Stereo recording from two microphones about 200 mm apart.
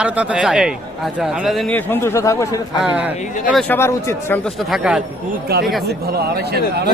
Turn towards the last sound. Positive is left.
turn(degrees=-55)  # may be behind; listen again after turning